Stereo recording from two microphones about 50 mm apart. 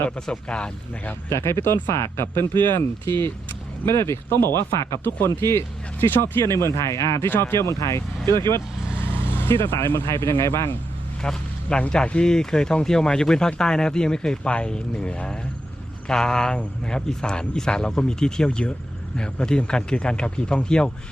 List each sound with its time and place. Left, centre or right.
0.3 s speech: centre
1.3 s speech: left
3.8 s speech: left
6.5 s speech: left
7.3 s speech: left
7.6 s speech: left
9.1 s vehicle: left
9.8 s speech: left
11.2 s speech: centre